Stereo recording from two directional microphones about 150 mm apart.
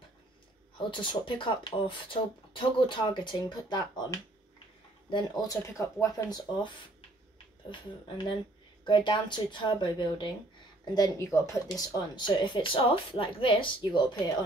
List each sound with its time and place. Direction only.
1.0 s speech: 35° left (ahead or behind)
8.8 s speech: 30° left (ahead or behind)